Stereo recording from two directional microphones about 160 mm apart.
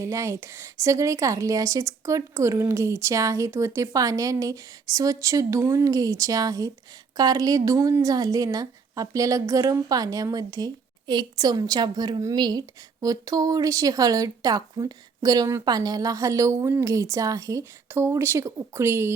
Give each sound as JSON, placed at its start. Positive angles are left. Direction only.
{"t": 0.0, "sound": "a woman's voice", "side_deg": -20}